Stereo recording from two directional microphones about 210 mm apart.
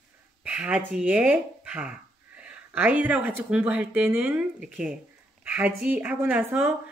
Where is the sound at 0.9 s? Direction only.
10° right (ahead or behind).